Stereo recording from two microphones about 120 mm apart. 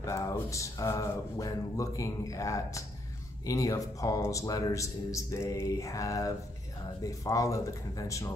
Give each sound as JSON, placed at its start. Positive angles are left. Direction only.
{"t": 0.0, "sound": "a man's voice", "side_deg": 25}